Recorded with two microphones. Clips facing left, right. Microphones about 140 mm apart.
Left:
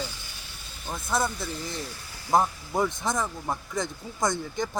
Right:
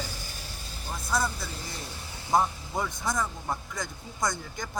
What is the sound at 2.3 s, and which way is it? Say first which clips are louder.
Speech: left 2 dB; 25° left (ahead or behind).